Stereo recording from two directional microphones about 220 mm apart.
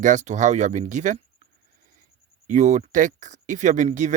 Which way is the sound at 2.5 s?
35° right (ahead or behind).